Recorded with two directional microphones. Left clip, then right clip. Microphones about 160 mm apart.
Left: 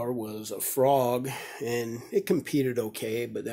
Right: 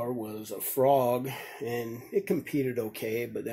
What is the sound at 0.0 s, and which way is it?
Speech, 25° left (ahead or behind).